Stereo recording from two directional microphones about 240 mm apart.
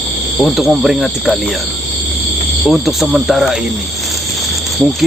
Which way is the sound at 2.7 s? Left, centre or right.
Centre.